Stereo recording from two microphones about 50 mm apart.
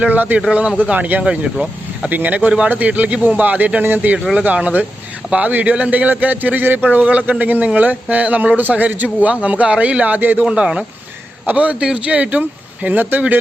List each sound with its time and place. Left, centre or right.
0.0 s a man's voice: right
1.2 s speech: centre
2.0 s a man's voice: right
7.0 s a man's voice: right
10.4 s speech: centre
11.4 s speech: right
11.8 s speech: centre
12.0 s a man's voice: right